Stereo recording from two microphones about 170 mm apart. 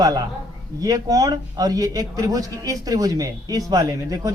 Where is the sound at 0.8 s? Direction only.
20° right (ahead or behind).